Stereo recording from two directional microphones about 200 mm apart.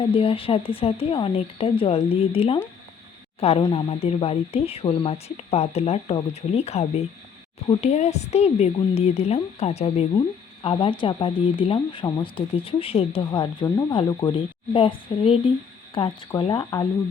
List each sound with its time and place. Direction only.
0.0 s a woman's voice: 25° left (ahead or behind)